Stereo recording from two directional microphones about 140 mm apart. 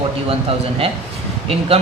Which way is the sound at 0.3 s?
45° right (ahead or behind).